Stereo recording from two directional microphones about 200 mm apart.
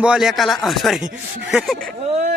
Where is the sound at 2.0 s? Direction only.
35° right (ahead or behind).